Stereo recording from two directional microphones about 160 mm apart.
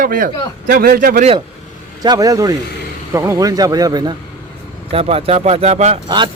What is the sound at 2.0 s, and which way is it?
Speech, 25° right (ahead or behind).